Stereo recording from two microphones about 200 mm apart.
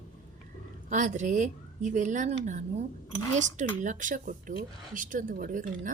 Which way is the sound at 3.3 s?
35° right (ahead or behind).